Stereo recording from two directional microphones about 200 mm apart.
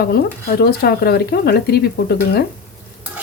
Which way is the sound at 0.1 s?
50° left (ahead or behind).